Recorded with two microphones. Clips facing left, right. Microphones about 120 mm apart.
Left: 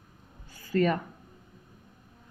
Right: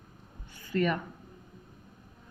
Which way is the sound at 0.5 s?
35° left (ahead or behind).